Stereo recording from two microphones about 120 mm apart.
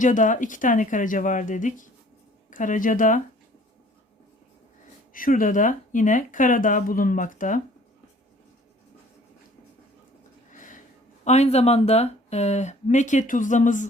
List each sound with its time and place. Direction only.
0.0 s speech: 90° left
5.4 s speech: 90° left
10.5 s a sound: 90° left
11.3 s speech: 65° left (ahead or behind); by 13.8 s 90° left